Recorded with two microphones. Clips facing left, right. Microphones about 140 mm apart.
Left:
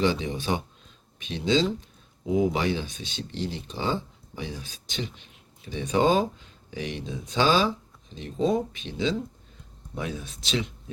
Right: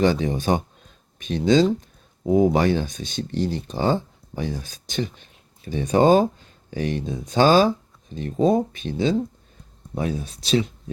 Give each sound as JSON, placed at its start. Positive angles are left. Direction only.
{"t": 0.0, "sound": "speech", "side_deg": -45}